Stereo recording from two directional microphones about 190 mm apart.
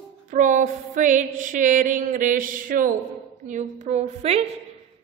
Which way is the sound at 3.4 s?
40° right (ahead or behind).